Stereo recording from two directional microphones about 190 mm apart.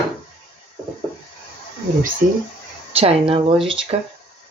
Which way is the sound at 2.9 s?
30° right (ahead or behind).